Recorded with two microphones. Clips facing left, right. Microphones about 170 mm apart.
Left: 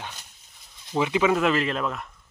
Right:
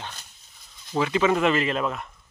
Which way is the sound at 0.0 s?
10° left (ahead or behind).